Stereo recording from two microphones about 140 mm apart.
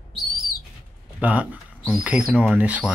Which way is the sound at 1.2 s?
10° right (ahead or behind).